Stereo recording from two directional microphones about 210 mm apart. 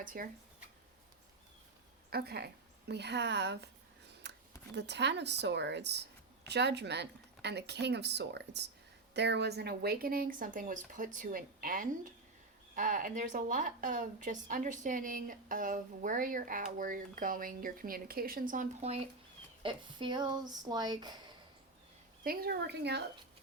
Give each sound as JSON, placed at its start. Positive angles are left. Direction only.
{"t": 0.0, "sound": "speech", "side_deg": -40}
{"t": 2.0, "sound": "speech", "side_deg": -50}
{"t": 4.2, "sound": "a sound", "side_deg": -55}
{"t": 4.7, "sound": "speech", "side_deg": -55}
{"t": 22.2, "sound": "speech", "side_deg": -45}